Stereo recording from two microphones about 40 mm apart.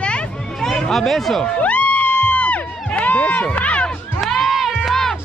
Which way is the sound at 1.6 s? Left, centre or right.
Left.